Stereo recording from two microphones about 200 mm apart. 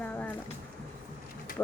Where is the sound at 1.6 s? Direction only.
10° left (ahead or behind).